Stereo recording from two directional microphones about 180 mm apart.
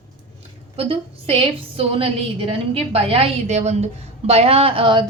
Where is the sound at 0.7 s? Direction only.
30° right (ahead or behind).